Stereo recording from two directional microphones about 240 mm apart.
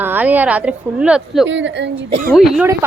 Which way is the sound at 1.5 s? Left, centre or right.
Right.